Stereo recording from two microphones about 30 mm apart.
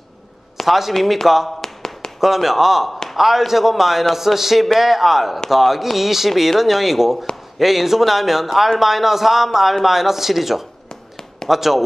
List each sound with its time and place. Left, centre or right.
0.7 s a man's voice: centre
1.6 s tap: left
2.1 s a man's voice: centre